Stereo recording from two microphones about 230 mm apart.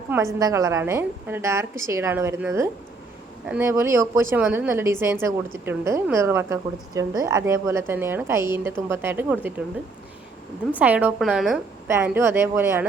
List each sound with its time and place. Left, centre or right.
0.1 s a woman's voice: centre
10.8 s a woman's voice: centre